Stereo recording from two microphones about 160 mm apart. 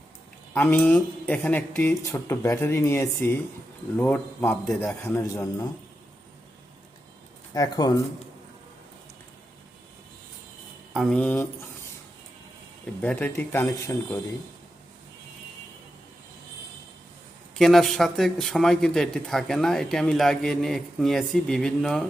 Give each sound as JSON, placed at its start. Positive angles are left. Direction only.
{"t": 0.5, "sound": "a man's voice", "side_deg": 10}
{"t": 7.5, "sound": "a man's voice", "side_deg": 25}
{"t": 10.9, "sound": "speech", "side_deg": 0}
{"t": 13.0, "sound": "speech", "side_deg": 10}
{"t": 17.5, "sound": "speech", "side_deg": 0}